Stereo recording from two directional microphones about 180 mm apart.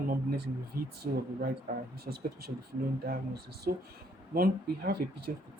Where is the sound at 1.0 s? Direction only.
45° right (ahead or behind).